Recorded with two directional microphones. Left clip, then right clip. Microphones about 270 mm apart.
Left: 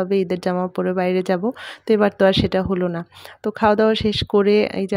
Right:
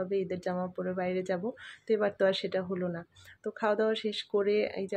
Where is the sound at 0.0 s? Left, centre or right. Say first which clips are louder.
Left 12 dB; left.